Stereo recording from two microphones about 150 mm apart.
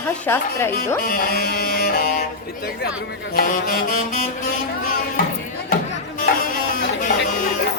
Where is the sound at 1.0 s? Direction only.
80° left.